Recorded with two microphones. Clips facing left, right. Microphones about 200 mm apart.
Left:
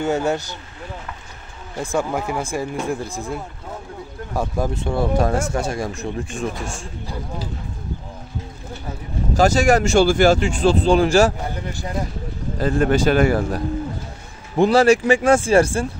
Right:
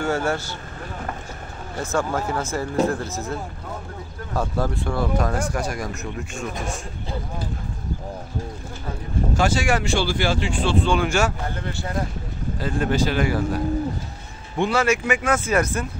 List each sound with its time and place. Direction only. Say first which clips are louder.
0.0 s speech: left 3 dB; 20° left (ahead or behind)
1.8 s speech: left 2 dB; 15° left (ahead or behind)
9.4 s speech: left 7 dB; 40° left (ahead or behind)
11.5 s speech: left 1 dB; 15° left (ahead or behind)
12.5 s a man's voice: left 5 dB; 45° left (ahead or behind)
14.6 s speech: left 7 dB; 35° left (ahead or behind)